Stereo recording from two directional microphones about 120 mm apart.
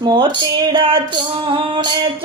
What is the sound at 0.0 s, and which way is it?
Speech, 40° right (ahead or behind).